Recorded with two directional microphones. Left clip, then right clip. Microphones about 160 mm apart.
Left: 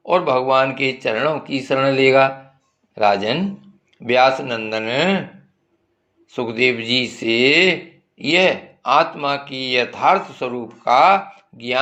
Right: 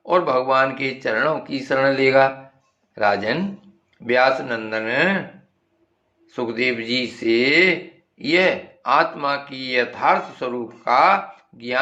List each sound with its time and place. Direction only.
0.0 s speech: 20° left (ahead or behind)
6.2 s speech: 20° left (ahead or behind)